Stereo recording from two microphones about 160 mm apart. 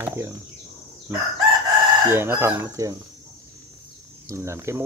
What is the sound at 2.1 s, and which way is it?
Speech, 15° right (ahead or behind).